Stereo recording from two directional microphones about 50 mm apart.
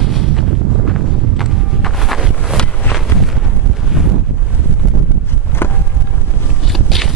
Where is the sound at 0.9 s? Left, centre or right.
Centre.